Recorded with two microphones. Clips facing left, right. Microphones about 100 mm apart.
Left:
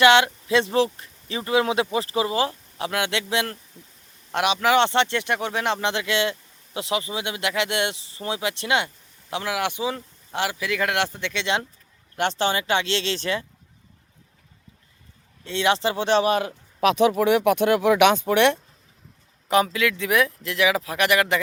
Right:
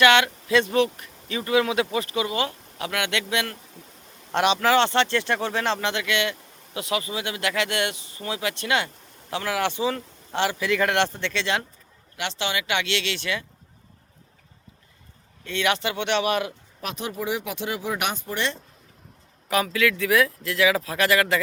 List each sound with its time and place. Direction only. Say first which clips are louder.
0.0 s speech: left 2 dB; 25° left (ahead or behind)
4.3 s speech: even; 5° left (ahead or behind)
5.9 s speech: left 2 dB; 25° left (ahead or behind)
12.1 s speech: left 5 dB; 45° left (ahead or behind)
15.4 s speech: left 3 dB; 25° left (ahead or behind)
16.8 s speech: left 12 dB; 90° left; by 18.6 s 65° left (ahead or behind)
19.5 s speech: left 2 dB; 25° left (ahead or behind)